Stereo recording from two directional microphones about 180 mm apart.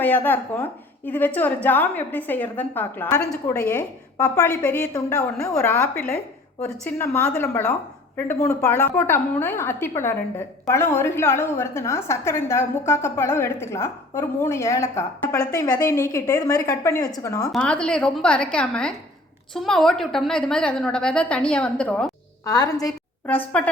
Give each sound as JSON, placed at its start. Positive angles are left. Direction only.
{"t": 0.0, "sound": "a woman's voice", "side_deg": 10}
{"t": 17.5, "sound": "a woman's voice", "side_deg": 5}
{"t": 22.4, "sound": "a woman's voice", "side_deg": 20}
{"t": 23.2, "sound": "a woman's voice", "side_deg": 10}